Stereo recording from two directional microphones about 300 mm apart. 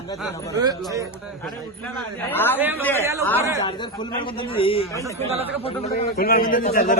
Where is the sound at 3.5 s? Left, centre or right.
Centre.